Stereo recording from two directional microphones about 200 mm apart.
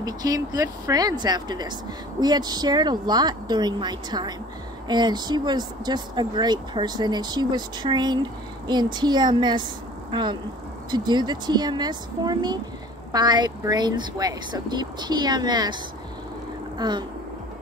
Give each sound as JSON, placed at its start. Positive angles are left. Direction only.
{"t": 0.0, "sound": "speech", "side_deg": -20}
{"t": 10.9, "sound": "speech", "side_deg": -20}
{"t": 16.7, "sound": "speech", "side_deg": -20}